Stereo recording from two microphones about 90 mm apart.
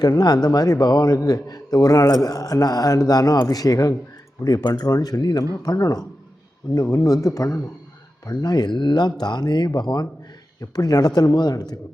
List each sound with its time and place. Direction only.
0.0 s speech: 50° left (ahead or behind)